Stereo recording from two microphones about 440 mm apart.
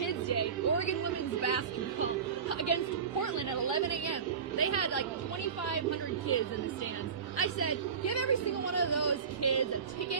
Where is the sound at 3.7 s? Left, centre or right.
Left.